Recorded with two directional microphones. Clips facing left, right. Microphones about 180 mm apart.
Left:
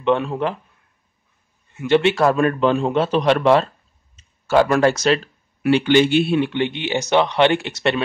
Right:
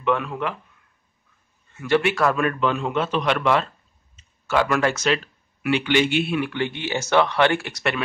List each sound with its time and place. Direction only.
0.0 s speech: 30° left (ahead or behind)
1.7 s speech: 20° left (ahead or behind)